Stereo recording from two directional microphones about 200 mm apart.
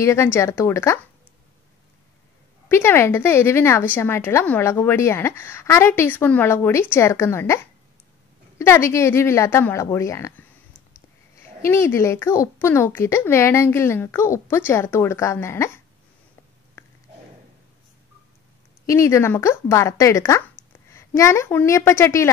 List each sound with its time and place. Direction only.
0.0 s a woman's voice: 15° left (ahead or behind)
2.7 s a woman's voice: 10° left (ahead or behind)
11.6 s a woman's voice: 15° left (ahead or behind)
16.8 s a sound: 10° left (ahead or behind)
18.9 s a woman's voice: 15° left (ahead or behind)